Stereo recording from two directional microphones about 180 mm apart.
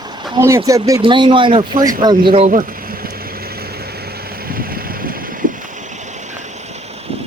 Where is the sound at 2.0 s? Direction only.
25° right (ahead or behind).